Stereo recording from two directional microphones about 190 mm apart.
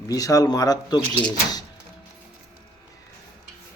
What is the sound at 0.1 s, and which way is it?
Speech, 20° left (ahead or behind).